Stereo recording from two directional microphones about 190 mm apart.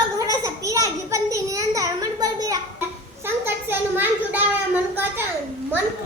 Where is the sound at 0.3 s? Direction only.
15° right (ahead or behind).